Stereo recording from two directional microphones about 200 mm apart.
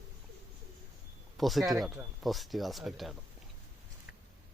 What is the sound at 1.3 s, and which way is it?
Speech, centre (ahead or behind).